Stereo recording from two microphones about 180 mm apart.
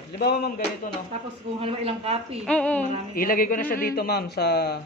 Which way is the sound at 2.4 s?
5° left (ahead or behind).